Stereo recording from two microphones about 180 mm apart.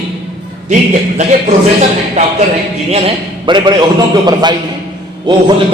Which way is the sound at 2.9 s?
30° right (ahead or behind).